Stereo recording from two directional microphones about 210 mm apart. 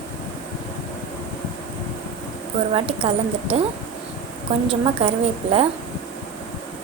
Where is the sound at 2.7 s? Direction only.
25° right (ahead or behind).